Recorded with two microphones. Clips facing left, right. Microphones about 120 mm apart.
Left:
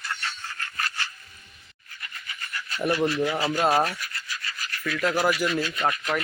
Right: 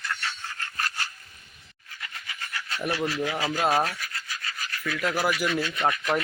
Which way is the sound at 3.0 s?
25° left (ahead or behind).